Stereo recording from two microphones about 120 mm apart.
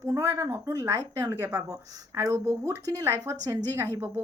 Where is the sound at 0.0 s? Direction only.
25° right (ahead or behind).